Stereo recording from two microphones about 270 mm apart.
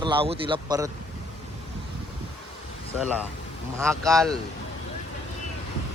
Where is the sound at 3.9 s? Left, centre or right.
Centre.